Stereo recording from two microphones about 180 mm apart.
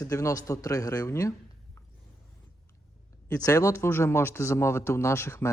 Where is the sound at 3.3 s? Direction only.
20° left (ahead or behind).